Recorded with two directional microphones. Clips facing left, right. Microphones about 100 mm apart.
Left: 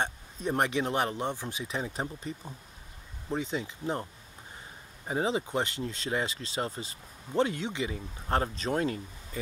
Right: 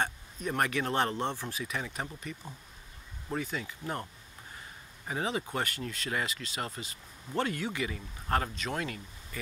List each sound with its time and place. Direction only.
0.0 s speech: 25° left (ahead or behind)
7.3 s speech: 20° left (ahead or behind)